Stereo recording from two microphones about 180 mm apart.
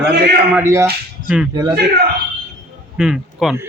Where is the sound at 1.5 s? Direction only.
20° right (ahead or behind).